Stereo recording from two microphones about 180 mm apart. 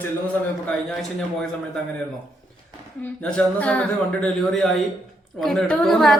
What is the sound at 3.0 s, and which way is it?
A man's voice, 5° left (ahead or behind).